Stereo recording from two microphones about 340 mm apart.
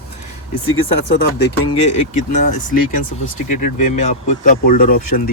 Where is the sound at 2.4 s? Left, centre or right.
Left.